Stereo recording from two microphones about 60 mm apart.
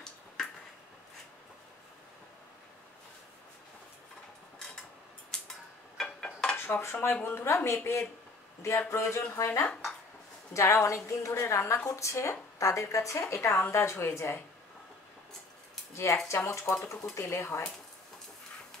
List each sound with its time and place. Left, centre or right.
5.3 s a sound: centre
6.5 s dishes: left
7.2 s a woman's voice: left
15.9 s speech: left
16.4 s speech: left
17.1 s a woman's voice: left